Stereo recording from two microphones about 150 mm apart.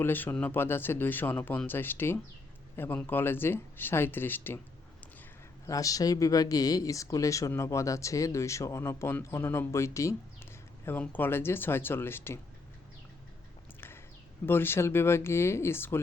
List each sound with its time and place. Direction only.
0.0 s speech: 15° left (ahead or behind)
5.6 s speech: 20° left (ahead or behind)
14.4 s speech: 15° left (ahead or behind)